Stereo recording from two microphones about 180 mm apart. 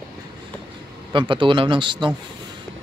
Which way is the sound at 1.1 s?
25° right (ahead or behind).